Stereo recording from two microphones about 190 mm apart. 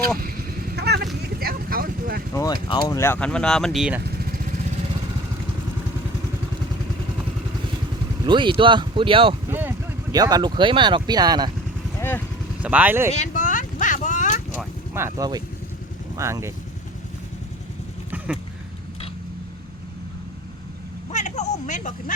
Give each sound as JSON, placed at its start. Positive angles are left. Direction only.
{"t": 0.8, "sound": "a sound", "side_deg": -60}
{"t": 1.2, "sound": "vehicle", "side_deg": -55}
{"t": 2.3, "sound": "speech", "side_deg": 20}
{"t": 4.0, "sound": "vehicle", "side_deg": -55}
{"t": 8.2, "sound": "speech", "side_deg": -25}
{"t": 9.5, "sound": "speech", "side_deg": -10}
{"t": 11.9, "sound": "vehicle", "side_deg": 10}
{"t": 12.6, "sound": "speech", "side_deg": -10}
{"t": 13.1, "sound": "a sound", "side_deg": 40}
{"t": 14.9, "sound": "speech", "side_deg": -15}
{"t": 21.1, "sound": "a sound", "side_deg": 40}